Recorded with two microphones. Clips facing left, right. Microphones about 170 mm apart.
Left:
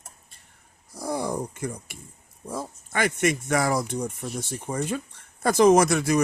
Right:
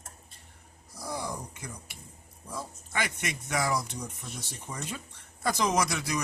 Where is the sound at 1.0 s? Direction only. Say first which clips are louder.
Left 8 dB; 50° left (ahead or behind).